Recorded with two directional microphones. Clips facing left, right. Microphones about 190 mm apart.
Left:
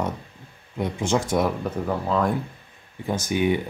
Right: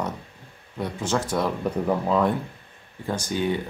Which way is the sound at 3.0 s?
20° left (ahead or behind).